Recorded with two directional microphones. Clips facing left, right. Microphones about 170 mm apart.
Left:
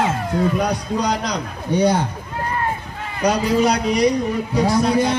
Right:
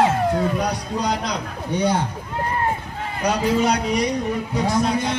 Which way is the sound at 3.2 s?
35° left (ahead or behind).